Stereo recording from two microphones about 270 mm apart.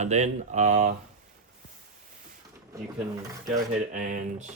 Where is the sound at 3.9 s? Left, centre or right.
Right.